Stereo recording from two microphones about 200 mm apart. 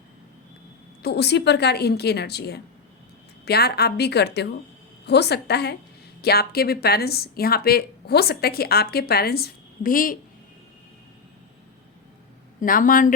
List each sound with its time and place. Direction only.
1.0 s a woman's voice: 55° left (ahead or behind)
12.5 s a woman's voice: 40° left (ahead or behind)